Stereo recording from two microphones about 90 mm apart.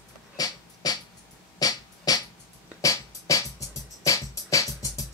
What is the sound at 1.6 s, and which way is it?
Music, 45° left (ahead or behind).